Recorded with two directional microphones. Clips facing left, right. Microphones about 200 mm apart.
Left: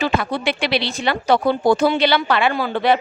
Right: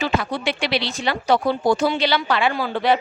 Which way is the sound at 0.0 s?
60° left (ahead or behind).